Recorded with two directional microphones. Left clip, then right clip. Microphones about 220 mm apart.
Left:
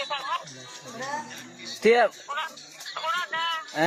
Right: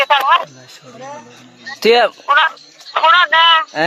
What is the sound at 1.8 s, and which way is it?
Speech, 45° right (ahead or behind).